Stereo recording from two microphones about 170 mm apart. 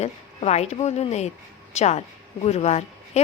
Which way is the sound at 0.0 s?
40° left (ahead or behind).